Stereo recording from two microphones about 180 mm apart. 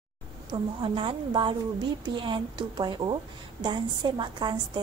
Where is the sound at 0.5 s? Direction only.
30° right (ahead or behind).